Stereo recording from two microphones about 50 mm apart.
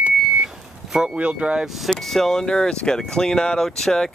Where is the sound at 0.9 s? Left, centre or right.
Centre.